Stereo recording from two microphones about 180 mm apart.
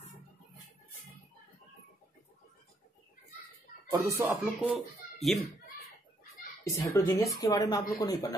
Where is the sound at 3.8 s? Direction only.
15° right (ahead or behind).